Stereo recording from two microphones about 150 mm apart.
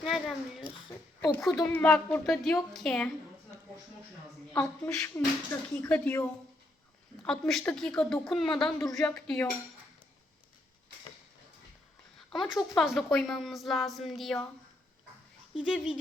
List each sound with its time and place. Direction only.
0.0 s a woman's voice: centre (ahead or behind)
4.6 s a woman's voice: 15° left (ahead or behind)
12.3 s a woman's voice: centre (ahead or behind)
15.6 s a woman's voice: 5° right (ahead or behind)